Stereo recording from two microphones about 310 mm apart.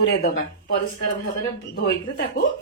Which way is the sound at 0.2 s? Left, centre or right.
Left.